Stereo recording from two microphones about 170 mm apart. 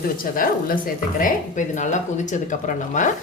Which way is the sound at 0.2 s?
55° left (ahead or behind).